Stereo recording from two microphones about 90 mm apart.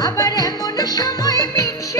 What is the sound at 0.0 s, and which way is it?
Music, 40° left (ahead or behind).